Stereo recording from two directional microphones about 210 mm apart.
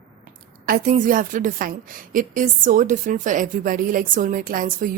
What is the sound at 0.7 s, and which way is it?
A woman's voice, 40° right (ahead or behind).